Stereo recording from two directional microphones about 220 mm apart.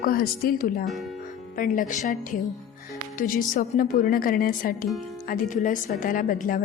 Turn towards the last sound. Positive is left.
turn(degrees=40)  # may be behind; listen again after turning